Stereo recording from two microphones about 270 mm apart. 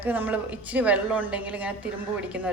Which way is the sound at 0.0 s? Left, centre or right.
Centre.